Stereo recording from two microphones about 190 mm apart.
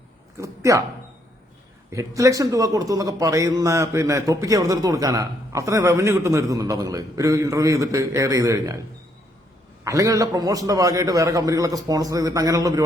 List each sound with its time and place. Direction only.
0.3 s speech: 15° right (ahead or behind)
1.9 s a man's voice: 15° right (ahead or behind)
9.8 s a man's voice: 15° right (ahead or behind)